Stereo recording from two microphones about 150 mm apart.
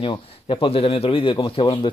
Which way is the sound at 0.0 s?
35° left (ahead or behind).